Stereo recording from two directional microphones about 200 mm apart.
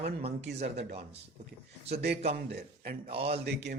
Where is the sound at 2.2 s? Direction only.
30° right (ahead or behind).